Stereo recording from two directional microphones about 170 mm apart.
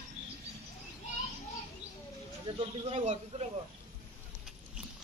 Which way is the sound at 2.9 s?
40° right (ahead or behind).